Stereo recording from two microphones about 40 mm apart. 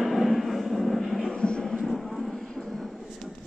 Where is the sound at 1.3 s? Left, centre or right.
Left.